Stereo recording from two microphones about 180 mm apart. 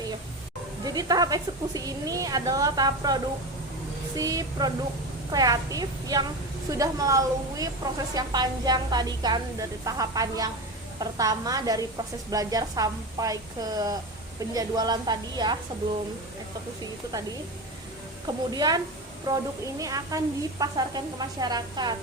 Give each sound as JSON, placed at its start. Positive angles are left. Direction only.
{"t": 0.9, "sound": "a woman's voice", "side_deg": -20}
{"t": 18.5, "sound": "a woman's voice", "side_deg": -20}